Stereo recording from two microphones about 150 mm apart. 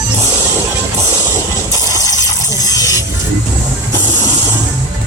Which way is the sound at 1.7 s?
25° left (ahead or behind).